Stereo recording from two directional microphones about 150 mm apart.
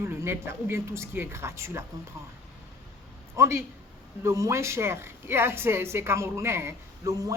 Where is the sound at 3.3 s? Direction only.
20° right (ahead or behind).